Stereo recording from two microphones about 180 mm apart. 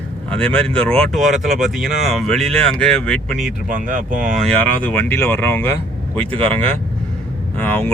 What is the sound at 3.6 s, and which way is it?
Speech, 45° right (ahead or behind).